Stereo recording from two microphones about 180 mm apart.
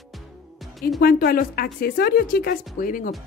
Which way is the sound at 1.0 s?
55° left (ahead or behind).